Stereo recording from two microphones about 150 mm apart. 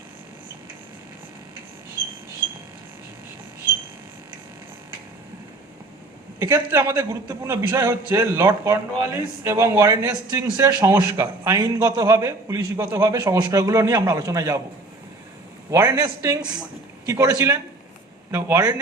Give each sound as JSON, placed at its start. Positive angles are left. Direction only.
{"t": 6.4, "sound": "a man's voice", "side_deg": -20}
{"t": 15.7, "sound": "a man's voice", "side_deg": -20}